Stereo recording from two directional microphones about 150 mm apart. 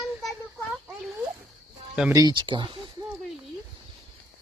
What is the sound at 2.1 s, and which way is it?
Speech, 30° right (ahead or behind).